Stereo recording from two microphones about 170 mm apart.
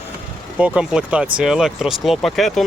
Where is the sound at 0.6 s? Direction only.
5° right (ahead or behind).